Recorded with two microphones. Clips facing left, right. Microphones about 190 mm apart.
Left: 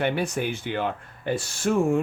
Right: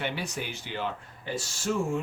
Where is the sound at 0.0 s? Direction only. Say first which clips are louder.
Left 8 dB; 55° left (ahead or behind).